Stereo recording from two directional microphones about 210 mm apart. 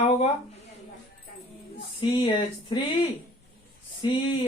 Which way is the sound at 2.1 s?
25° left (ahead or behind).